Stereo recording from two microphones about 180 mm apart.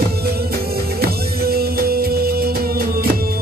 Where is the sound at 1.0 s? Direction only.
60° right (ahead or behind).